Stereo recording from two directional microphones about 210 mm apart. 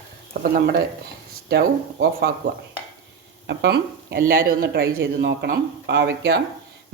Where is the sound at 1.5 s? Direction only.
50° right (ahead or behind).